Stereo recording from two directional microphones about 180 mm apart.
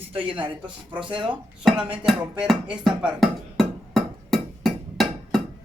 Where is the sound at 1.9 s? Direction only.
5° right (ahead or behind).